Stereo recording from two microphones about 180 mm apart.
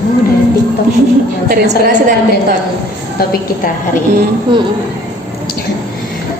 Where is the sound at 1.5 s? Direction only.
45° right (ahead or behind).